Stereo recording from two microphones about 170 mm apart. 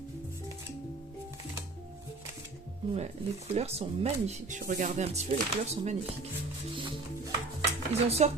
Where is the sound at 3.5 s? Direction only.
35° right (ahead or behind).